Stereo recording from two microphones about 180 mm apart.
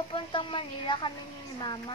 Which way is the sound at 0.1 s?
30° left (ahead or behind).